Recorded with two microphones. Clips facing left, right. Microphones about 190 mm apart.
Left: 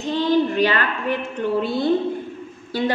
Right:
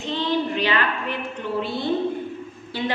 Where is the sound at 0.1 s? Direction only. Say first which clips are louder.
Left 5 dB; 45° left (ahead or behind).